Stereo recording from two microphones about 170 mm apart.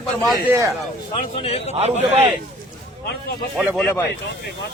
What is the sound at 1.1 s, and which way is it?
Speech, 35° left (ahead or behind).